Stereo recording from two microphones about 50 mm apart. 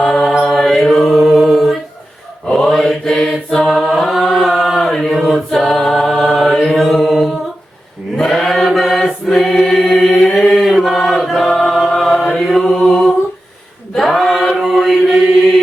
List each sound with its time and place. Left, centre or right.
0.0 s chant: centre
0.4 s mantra: centre
3.5 s chant: centre
6.7 s mantra: centre
8.1 s chant: centre
12.3 s mantra: centre
13.9 s choir: centre